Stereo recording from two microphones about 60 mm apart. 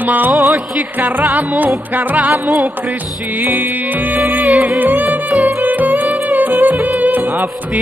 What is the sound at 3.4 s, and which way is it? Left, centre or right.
Music, right.